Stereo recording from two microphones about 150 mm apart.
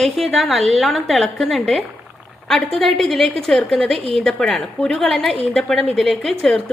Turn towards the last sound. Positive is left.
turn(degrees=5)  # may be behind; listen again after turning